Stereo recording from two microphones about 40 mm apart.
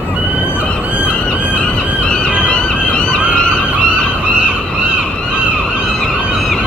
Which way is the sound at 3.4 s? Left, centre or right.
Left.